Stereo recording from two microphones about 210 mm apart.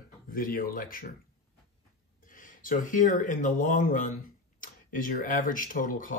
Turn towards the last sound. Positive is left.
turn(degrees=40)  # may be behind; listen again after turning